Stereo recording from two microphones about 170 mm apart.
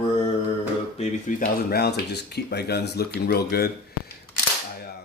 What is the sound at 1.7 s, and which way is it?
Speech, 70° left (ahead or behind).